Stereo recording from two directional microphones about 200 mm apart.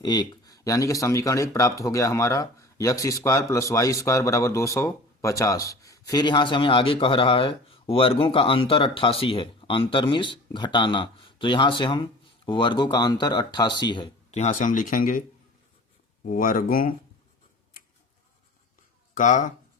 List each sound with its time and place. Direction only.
0.0 s speech: 20° left (ahead or behind); by 15.2 s 40° left (ahead or behind)
16.2 s speech: 45° left (ahead or behind)
19.1 s speech: 40° left (ahead or behind)